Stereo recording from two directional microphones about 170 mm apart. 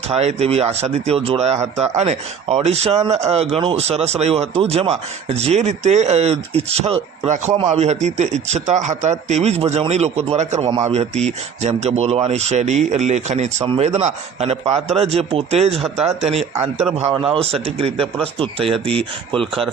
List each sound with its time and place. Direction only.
0.1 s speech: 40° right (ahead or behind)
19.4 s speech: centre (ahead or behind)